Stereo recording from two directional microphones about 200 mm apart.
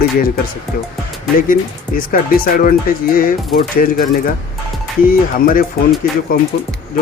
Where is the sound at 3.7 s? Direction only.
45° left (ahead or behind).